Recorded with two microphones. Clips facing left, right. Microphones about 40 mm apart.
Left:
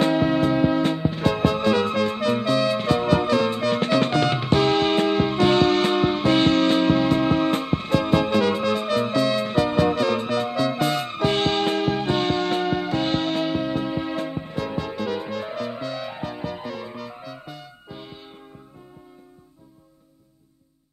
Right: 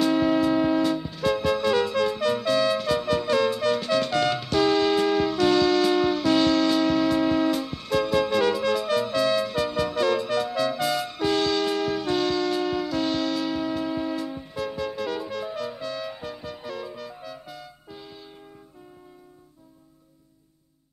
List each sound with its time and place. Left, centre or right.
0.0 s music: left